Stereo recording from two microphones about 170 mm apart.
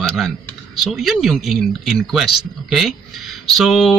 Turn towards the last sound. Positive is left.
turn(degrees=0)  # may be behind; listen again after turning